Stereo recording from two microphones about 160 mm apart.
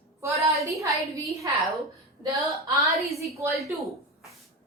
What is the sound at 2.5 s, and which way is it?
Speech, centre (ahead or behind).